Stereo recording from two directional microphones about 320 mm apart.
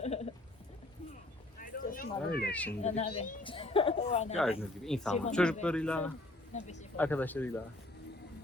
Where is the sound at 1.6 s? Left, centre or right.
Left.